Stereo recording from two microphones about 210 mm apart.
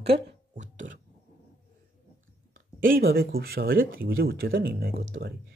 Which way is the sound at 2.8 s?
45° right (ahead or behind).